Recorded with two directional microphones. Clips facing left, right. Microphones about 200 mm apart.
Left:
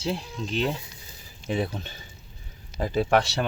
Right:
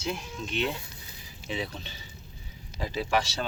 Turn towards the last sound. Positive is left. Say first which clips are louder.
# left 6 dB
turn(degrees=65)  # may be behind; listen again after turning